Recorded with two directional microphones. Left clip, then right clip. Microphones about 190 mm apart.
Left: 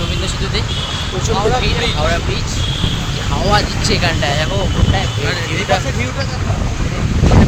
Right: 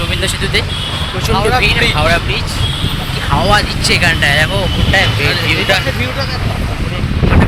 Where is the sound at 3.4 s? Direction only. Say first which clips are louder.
Right 2 dB; 5° right (ahead or behind).